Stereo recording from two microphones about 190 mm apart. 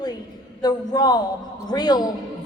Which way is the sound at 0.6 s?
20° left (ahead or behind).